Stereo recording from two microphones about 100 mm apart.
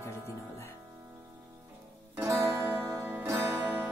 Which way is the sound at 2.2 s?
30° right (ahead or behind).